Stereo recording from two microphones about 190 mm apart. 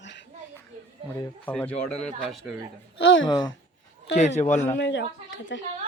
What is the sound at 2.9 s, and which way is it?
Speech, 90° left.